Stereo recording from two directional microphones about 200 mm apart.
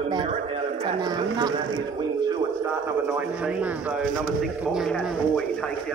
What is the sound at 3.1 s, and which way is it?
Speech, 5° right (ahead or behind).